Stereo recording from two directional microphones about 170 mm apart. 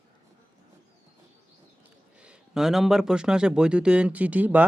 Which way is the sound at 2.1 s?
5° right (ahead or behind).